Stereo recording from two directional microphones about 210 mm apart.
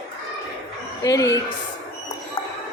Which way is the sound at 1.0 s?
15° left (ahead or behind).